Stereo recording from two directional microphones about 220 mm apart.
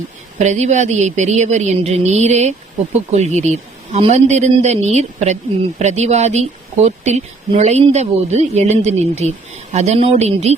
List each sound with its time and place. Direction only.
0.3 s a woman's voice: 30° right (ahead or behind)